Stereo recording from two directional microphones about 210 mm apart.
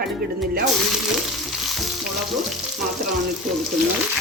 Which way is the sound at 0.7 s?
Centre (ahead or behind).